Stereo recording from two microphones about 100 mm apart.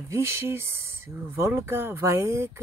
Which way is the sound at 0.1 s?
25° right (ahead or behind).